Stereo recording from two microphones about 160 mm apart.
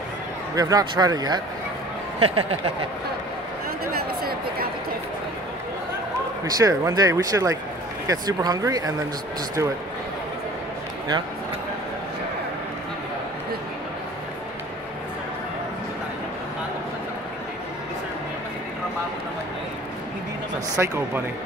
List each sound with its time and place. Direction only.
0.6 s speech: 25° right (ahead or behind)
2.1 s speech: 35° right (ahead or behind)
3.9 s a sound: 70° right (ahead or behind)
6.4 s speech: 20° right (ahead or behind)
20.7 s speech: 20° right (ahead or behind)